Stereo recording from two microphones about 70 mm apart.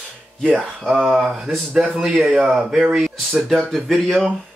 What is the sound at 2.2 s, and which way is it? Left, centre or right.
Music, centre.